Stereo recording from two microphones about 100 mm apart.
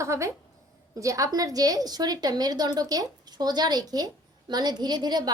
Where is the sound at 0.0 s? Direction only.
30° right (ahead or behind).